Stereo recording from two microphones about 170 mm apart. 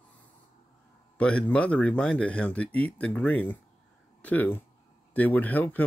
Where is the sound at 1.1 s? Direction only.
10° left (ahead or behind).